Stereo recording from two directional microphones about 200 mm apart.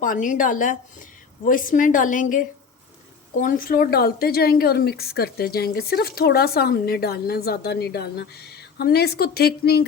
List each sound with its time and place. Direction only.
0.0 s a woman's voice: 40° left (ahead or behind)